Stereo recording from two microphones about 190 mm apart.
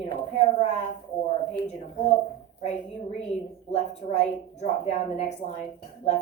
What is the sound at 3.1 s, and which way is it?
A woman's voice, 35° left (ahead or behind).